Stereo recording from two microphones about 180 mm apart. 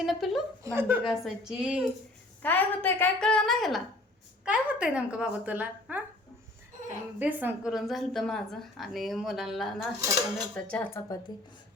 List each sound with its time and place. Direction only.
0.0 s a woman's voice: centre (ahead or behind)
0.6 s speech: 15° right (ahead or behind)
1.0 s a woman's voice: centre (ahead or behind)
2.4 s a woman's voice: 10° left (ahead or behind); by 6.0 s 10° right (ahead or behind)
7.2 s a woman's voice: 10° right (ahead or behind); by 11.0 s 10° left (ahead or behind)
11.3 s speech: 20° left (ahead or behind)